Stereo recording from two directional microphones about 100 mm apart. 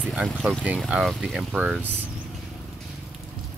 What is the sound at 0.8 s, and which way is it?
Speech, 5° right (ahead or behind).